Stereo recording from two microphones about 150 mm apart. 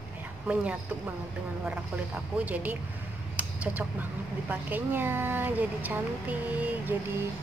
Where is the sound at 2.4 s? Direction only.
10° right (ahead or behind).